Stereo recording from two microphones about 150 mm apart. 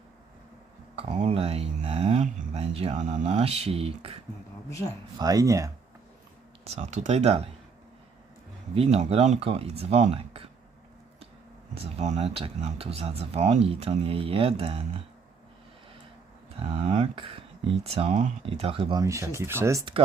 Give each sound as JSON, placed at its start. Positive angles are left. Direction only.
{"t": 0.9, "sound": "speech", "side_deg": -40}
{"t": 5.2, "sound": "speech", "side_deg": -25}
{"t": 6.7, "sound": "speech", "side_deg": -50}
{"t": 8.7, "sound": "speech", "side_deg": -40}
{"t": 11.8, "sound": "speech", "side_deg": -50}
{"t": 16.6, "sound": "speech", "side_deg": -40}
{"t": 19.0, "sound": "speech", "side_deg": -20}